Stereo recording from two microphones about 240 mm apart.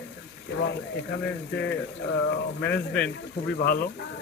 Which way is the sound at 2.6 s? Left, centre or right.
Centre.